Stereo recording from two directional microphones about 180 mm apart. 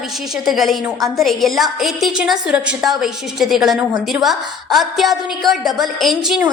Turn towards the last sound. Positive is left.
turn(degrees=0)  # may be behind; listen again after turning